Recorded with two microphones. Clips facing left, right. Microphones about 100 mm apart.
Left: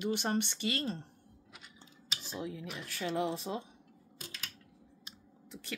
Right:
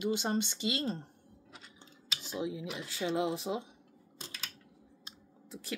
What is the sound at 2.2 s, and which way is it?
Speech, 15° right (ahead or behind).